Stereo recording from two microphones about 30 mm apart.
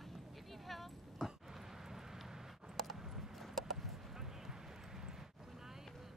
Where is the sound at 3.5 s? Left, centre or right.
Centre.